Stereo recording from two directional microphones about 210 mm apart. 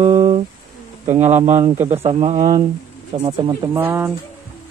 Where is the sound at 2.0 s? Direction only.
30° right (ahead or behind).